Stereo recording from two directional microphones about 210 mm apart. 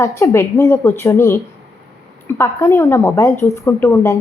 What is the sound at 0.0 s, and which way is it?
A woman's voice, 15° left (ahead or behind).